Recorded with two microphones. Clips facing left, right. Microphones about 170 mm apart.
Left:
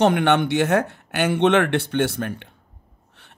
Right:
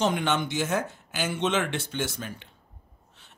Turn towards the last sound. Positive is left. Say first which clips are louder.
# left 5 dB
turn(degrees=60)  # may be behind; listen again after turning